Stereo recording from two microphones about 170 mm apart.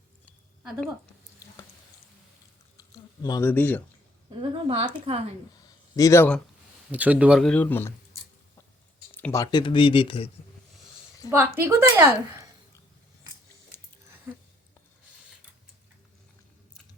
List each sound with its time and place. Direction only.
2.7 s a sound: 20° left (ahead or behind)
4.4 s a woman's voice: 30° right (ahead or behind)
6.0 s speech: 15° left (ahead or behind)
6.9 s speech: 10° right (ahead or behind); by 7.9 s 10° left (ahead or behind)
9.1 s speech: 15° left (ahead or behind); by 10.2 s 30° left (ahead or behind)
11.3 s a woman's voice: 15° right (ahead or behind)
14.3 s speech: 10° right (ahead or behind)